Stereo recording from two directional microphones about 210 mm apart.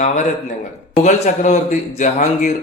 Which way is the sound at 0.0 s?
35° left (ahead or behind).